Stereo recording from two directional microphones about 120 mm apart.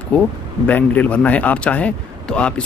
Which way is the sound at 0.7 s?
15° left (ahead or behind).